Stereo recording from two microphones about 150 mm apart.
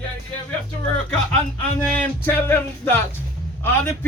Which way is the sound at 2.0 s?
10° left (ahead or behind).